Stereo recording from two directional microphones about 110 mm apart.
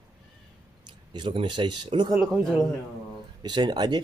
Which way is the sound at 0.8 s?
45° right (ahead or behind).